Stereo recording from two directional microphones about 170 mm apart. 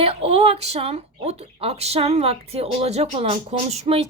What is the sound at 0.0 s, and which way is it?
A woman's voice, 35° right (ahead or behind).